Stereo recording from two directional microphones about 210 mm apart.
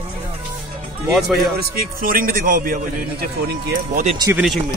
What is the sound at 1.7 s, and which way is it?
A man's voice, 45° right (ahead or behind).